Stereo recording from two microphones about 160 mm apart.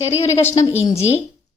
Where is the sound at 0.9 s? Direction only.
40° left (ahead or behind).